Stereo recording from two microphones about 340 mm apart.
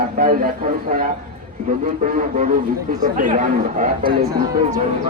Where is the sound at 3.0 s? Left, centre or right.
Right.